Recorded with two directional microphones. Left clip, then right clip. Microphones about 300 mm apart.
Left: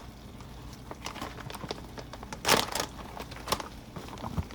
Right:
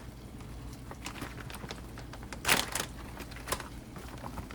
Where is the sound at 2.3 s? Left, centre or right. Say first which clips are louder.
Left 3 dB; left.